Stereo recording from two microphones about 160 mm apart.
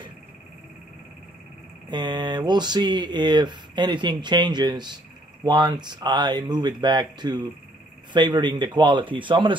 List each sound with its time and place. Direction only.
1.9 s speech: 25° right (ahead or behind)